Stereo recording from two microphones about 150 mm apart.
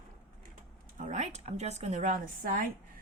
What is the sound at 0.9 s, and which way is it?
Speech, 55° right (ahead or behind).